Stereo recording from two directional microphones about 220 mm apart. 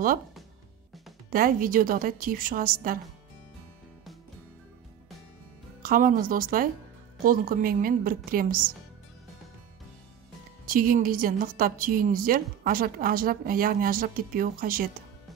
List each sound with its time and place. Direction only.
1.3 s a woman's voice: 40° right (ahead or behind)
5.8 s a woman's voice: 40° right (ahead or behind)
10.6 s a woman's voice: 40° right (ahead or behind)